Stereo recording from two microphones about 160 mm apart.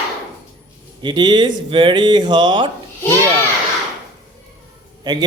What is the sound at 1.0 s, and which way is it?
Speech, 30° right (ahead or behind).